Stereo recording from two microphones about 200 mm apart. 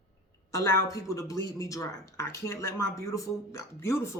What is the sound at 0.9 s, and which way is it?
Speech, 15° left (ahead or behind).